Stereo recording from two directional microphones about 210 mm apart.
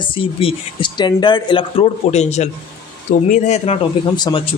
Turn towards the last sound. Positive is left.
turn(degrees=25)  # may be behind; listen again after turning